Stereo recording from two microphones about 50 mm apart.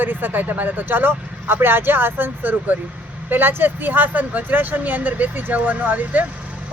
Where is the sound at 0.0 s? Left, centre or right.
Right.